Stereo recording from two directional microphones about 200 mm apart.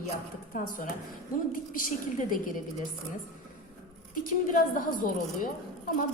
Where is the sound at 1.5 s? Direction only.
45° left (ahead or behind).